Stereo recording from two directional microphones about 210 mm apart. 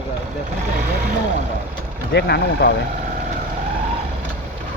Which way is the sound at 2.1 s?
50° left (ahead or behind).